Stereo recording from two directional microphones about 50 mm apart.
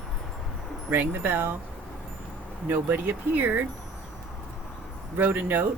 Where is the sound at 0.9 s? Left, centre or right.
Right.